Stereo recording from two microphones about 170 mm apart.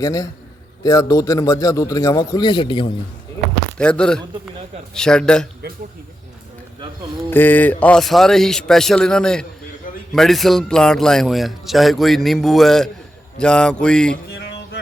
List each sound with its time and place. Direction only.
0.0 s a man's voice: 20° left (ahead or behind)
3.8 s a man's voice: 5° left (ahead or behind)
7.3 s a man's voice: 10° left (ahead or behind)